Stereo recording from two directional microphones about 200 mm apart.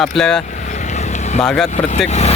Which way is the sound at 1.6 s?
35° left (ahead or behind).